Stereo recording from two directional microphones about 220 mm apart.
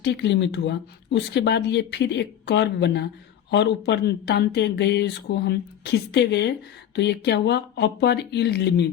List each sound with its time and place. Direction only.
0.0 s speech: 50° left (ahead or behind)